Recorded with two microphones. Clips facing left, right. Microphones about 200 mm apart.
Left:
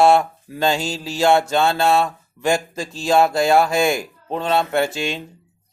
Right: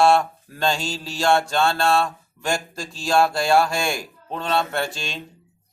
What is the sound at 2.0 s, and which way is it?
Speech, 5° left (ahead or behind).